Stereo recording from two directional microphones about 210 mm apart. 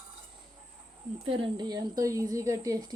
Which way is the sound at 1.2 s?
25° right (ahead or behind).